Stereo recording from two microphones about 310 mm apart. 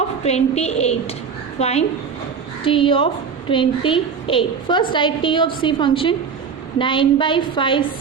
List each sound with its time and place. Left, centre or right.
0.2 s a woman's voice: left